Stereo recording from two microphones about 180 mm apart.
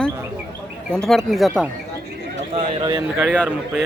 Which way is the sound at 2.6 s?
30° right (ahead or behind).